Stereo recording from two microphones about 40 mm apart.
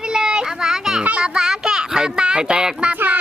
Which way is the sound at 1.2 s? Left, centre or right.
Centre.